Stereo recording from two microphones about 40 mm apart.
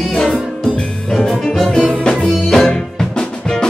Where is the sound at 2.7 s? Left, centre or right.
Centre.